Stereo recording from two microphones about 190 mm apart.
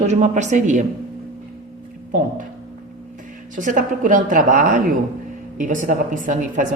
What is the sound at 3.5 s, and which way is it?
Speech, 40° right (ahead or behind).